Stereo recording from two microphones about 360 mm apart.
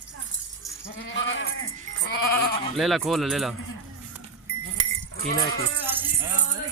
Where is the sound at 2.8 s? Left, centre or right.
Centre.